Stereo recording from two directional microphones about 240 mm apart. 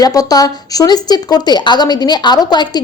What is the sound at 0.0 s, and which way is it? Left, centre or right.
A woman's voice, centre.